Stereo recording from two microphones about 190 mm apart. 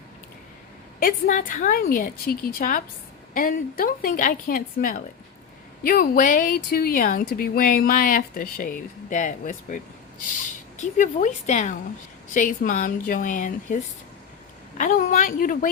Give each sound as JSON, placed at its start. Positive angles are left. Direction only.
{"t": 0.9, "sound": "speech", "side_deg": 45}
{"t": 14.8, "sound": "speech", "side_deg": 45}